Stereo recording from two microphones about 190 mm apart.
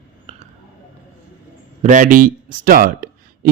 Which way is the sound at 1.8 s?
45° right (ahead or behind).